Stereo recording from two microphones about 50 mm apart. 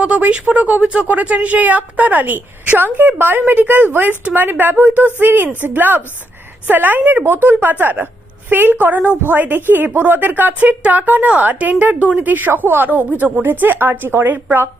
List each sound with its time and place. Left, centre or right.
0.0 s speech: right